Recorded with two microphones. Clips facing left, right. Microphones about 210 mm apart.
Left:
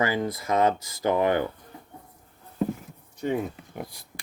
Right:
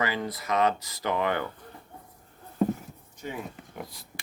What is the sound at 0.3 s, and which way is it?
Speech, 25° left (ahead or behind).